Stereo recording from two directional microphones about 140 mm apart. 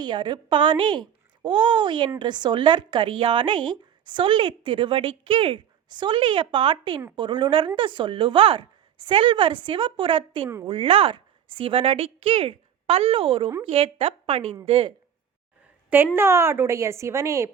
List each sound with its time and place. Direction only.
0.0 s a woman's voice: 30° right (ahead or behind)
16.1 s speech: 20° right (ahead or behind)